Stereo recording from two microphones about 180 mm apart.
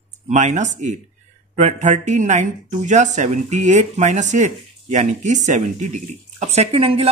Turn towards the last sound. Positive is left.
turn(degrees=-30)  # may be behind; listen again after turning